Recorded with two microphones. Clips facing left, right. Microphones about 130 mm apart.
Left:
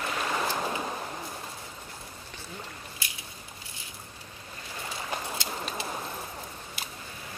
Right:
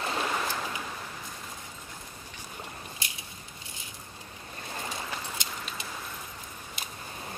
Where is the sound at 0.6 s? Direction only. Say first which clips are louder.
Left 5 dB; 35° left (ahead or behind).